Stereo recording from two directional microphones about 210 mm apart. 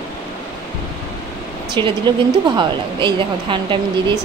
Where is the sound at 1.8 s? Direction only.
25° right (ahead or behind).